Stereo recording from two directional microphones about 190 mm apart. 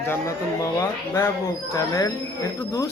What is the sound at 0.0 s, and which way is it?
Speech, 10° left (ahead or behind).